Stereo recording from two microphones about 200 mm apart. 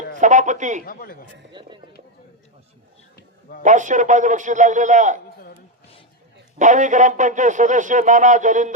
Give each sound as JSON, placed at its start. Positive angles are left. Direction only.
{"t": 0.2, "sound": "speech", "side_deg": -40}
{"t": 0.9, "sound": "speech", "side_deg": 45}
{"t": 1.6, "sound": "speech", "side_deg": -20}
{"t": 3.6, "sound": "speech", "side_deg": -40}
{"t": 6.6, "sound": "speech", "side_deg": -40}